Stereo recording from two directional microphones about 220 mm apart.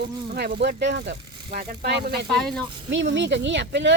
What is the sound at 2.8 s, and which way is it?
Speech, 55° right (ahead or behind).